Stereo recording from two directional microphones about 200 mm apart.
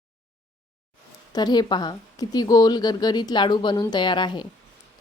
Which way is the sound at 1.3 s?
20° left (ahead or behind).